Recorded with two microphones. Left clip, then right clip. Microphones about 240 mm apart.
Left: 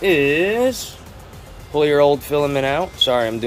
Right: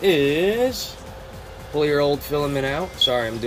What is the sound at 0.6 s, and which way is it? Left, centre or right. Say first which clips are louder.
Speech: left 3 dB; centre.